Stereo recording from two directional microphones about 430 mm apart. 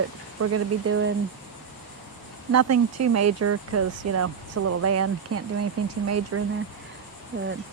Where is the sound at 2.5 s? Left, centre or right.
Right.